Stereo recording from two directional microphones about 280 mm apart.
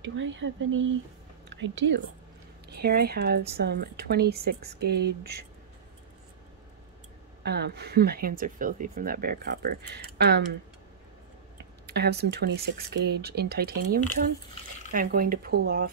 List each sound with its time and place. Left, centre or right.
0.0 s speech: right
7.4 s speech: right
11.8 s speech: right